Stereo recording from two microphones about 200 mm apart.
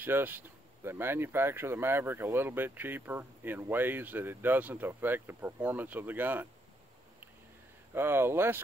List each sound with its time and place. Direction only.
0.0 s speech: 10° right (ahead or behind)
7.9 s speech: 10° right (ahead or behind)